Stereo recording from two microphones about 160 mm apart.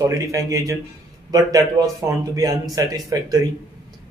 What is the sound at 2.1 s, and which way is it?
Speech, 20° right (ahead or behind).